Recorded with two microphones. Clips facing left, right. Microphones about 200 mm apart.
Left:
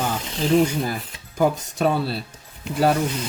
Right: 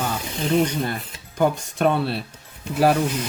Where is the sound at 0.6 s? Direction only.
5° left (ahead or behind).